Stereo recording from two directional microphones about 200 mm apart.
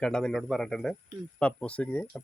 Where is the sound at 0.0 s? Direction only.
5° left (ahead or behind).